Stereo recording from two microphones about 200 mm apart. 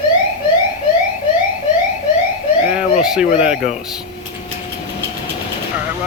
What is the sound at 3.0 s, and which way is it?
Speech, 5° right (ahead or behind).